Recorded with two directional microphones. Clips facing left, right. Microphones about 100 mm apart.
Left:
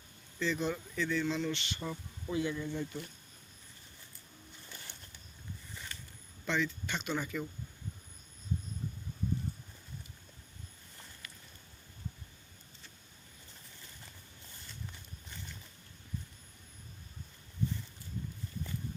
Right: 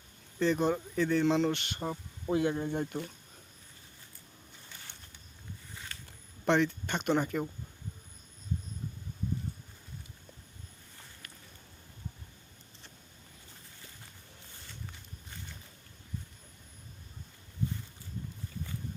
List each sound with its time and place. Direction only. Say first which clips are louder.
0.3 s speech: right 6 dB; 50° right (ahead or behind)
1.2 s speech: right 7 dB; 65° right (ahead or behind)
1.5 s speech: right 4 dB; 50° right (ahead or behind)
2.3 s speech: right 5 dB; 55° right (ahead or behind)
6.4 s speech: right 7 dB; 55° right (ahead or behind)